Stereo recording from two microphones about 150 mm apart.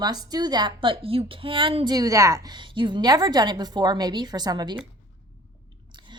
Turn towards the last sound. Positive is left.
turn(degrees=-25)  # may be behind; listen again after turning